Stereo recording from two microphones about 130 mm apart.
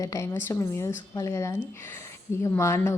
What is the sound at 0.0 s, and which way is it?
Speech, 25° left (ahead or behind).